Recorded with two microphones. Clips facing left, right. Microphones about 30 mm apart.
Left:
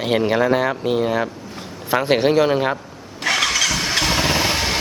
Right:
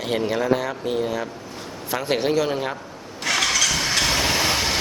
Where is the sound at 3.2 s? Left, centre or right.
Centre.